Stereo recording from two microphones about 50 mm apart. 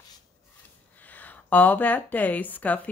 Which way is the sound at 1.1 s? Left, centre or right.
Left.